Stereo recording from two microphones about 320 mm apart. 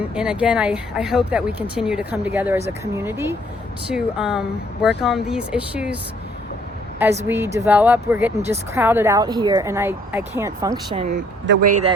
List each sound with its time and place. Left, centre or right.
0.1 s speech: centre
7.3 s speech: centre
10.9 s speech: right